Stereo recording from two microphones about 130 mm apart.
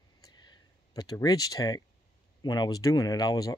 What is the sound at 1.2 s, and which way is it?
Speech, 25° left (ahead or behind).